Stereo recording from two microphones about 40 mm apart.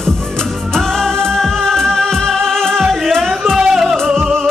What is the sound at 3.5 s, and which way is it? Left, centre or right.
Music, centre.